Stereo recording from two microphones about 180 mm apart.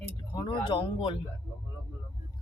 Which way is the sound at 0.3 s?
25° left (ahead or behind).